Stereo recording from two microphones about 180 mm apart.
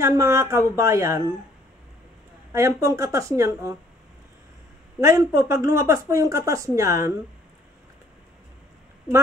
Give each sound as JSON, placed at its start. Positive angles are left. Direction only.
{"t": 0.0, "sound": "speech", "side_deg": -15}
{"t": 2.5, "sound": "speech", "side_deg": -15}
{"t": 5.0, "sound": "speech", "side_deg": -15}